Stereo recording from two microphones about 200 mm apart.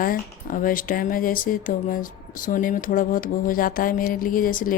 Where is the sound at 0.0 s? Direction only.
45° left (ahead or behind).